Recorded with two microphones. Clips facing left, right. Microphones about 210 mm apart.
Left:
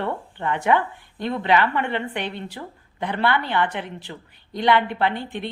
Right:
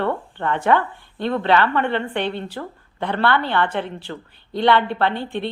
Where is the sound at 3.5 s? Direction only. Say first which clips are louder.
Right 2 dB; 15° left (ahead or behind).